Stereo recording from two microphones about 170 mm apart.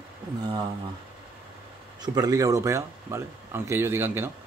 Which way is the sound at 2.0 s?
25° right (ahead or behind).